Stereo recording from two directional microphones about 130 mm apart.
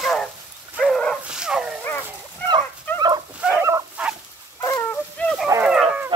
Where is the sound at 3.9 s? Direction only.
10° right (ahead or behind).